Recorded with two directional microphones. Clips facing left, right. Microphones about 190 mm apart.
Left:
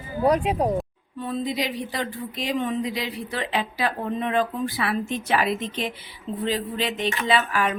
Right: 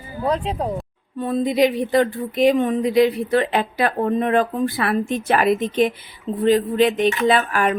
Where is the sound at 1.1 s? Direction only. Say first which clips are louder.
Right 8 dB; 50° right (ahead or behind).